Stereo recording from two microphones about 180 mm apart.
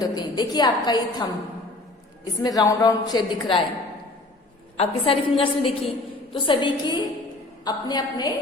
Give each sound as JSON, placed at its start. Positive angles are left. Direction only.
{"t": 0.2, "sound": "a woman's voice", "side_deg": 25}
{"t": 4.8, "sound": "a woman's voice", "side_deg": 30}